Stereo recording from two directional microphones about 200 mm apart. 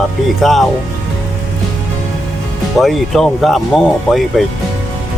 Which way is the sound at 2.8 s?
Centre (ahead or behind).